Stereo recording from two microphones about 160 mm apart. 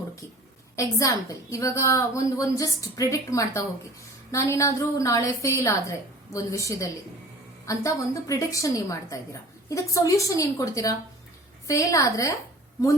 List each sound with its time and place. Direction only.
0.8 s a woman's voice: 20° left (ahead or behind)